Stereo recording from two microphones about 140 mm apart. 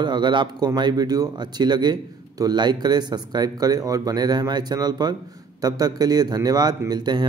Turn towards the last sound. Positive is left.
turn(degrees=-30)  # may be behind; listen again after turning